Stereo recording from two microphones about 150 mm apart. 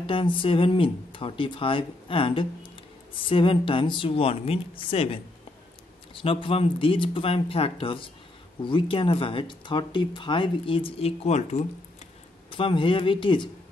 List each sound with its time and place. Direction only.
0.0 s speech: 35° left (ahead or behind)
12.4 s speech: 35° left (ahead or behind)